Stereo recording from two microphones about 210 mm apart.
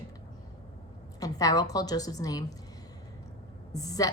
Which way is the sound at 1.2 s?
15° left (ahead or behind).